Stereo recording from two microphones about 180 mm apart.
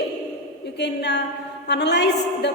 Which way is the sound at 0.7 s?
70° left (ahead or behind).